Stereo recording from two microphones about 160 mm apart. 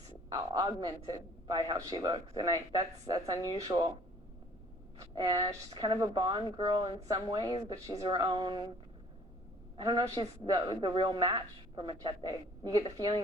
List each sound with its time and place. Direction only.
0.3 s a woman's voice: 25° right (ahead or behind)
4.9 s a woman's voice: 25° right (ahead or behind)
9.7 s a woman's voice: 25° right (ahead or behind)